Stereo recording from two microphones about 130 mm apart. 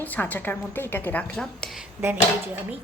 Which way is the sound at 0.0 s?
15° left (ahead or behind).